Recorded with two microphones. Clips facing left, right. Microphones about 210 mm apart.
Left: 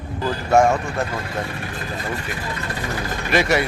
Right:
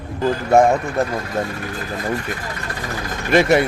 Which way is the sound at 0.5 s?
35° right (ahead or behind).